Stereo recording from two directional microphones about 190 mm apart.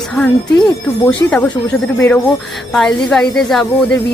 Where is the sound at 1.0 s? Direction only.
10° left (ahead or behind).